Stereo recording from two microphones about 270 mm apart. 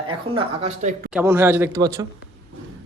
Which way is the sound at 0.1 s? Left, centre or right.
Right.